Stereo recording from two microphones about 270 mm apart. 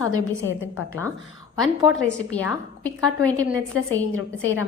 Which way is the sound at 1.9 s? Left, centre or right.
Centre.